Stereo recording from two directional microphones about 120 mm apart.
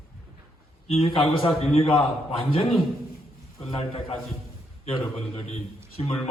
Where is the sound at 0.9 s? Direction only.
55° left (ahead or behind).